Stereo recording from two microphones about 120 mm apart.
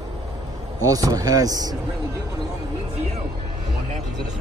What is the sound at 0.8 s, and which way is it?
Speech, 30° right (ahead or behind).